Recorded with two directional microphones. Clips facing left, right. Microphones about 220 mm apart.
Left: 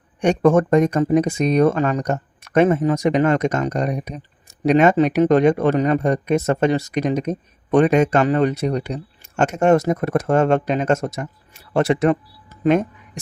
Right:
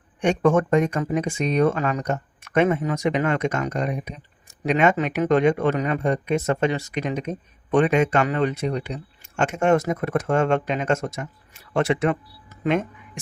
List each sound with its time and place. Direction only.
0.2 s speech: 40° left (ahead or behind)